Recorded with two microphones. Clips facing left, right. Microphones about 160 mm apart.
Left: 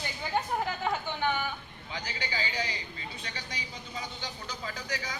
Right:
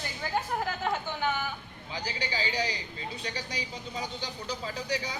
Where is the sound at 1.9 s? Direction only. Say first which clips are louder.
Right 2 dB; 30° right (ahead or behind).